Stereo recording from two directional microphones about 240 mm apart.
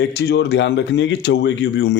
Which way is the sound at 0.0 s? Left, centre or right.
Left.